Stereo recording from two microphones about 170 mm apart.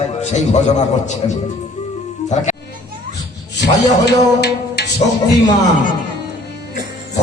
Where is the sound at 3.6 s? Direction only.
80° left.